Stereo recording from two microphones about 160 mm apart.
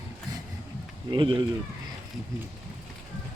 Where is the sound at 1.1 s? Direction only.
30° right (ahead or behind).